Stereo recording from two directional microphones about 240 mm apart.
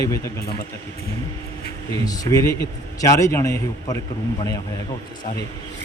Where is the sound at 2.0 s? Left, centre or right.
Centre.